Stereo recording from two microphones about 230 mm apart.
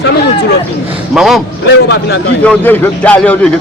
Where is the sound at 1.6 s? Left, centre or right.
Left.